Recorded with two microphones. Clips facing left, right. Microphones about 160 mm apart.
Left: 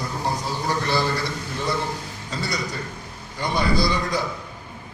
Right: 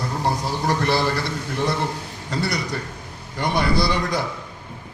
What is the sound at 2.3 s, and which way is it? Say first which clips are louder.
A man's voice: right 3 dB; 65° right (ahead or behind).